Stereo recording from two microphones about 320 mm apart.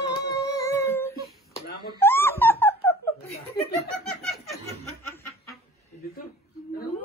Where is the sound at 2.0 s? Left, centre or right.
Centre.